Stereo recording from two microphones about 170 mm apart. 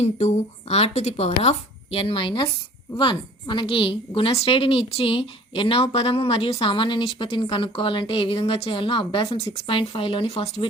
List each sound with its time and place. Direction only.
0.0 s a woman's voice: 40° left (ahead or behind)